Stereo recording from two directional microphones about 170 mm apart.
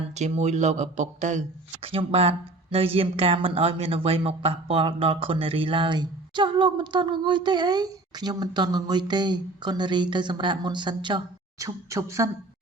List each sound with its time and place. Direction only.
0.2 s a man's voice: 40° right (ahead or behind); by 12.3 s 20° right (ahead or behind)